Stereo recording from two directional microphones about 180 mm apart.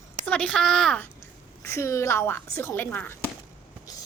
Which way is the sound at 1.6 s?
15° left (ahead or behind).